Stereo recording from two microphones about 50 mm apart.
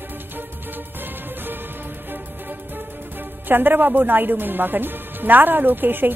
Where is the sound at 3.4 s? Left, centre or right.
Right.